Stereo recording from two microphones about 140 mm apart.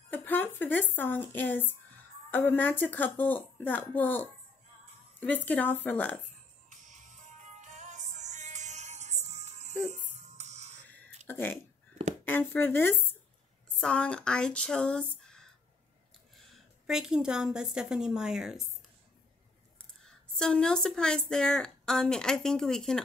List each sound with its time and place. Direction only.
0.1 s a woman's voice: 15° left (ahead or behind)
6.7 s music: 60° right (ahead or behind)
11.2 s a woman's voice: 15° left (ahead or behind)
16.8 s a woman's voice: 5° right (ahead or behind)
20.1 s a woman's voice: 5° left (ahead or behind)